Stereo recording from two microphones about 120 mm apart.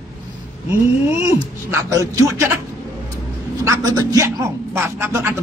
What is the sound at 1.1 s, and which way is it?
A man's voice, 25° right (ahead or behind).